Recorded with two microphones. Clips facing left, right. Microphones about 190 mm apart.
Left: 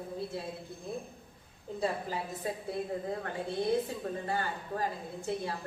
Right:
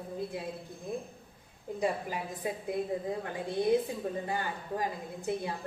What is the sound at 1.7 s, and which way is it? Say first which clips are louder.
Speech: right 1 dB; 15° right (ahead or behind).